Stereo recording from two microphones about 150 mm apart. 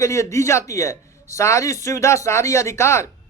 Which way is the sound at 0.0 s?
20° left (ahead or behind).